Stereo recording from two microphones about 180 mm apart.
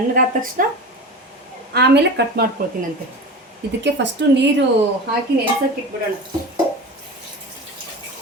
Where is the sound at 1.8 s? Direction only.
65° right (ahead or behind).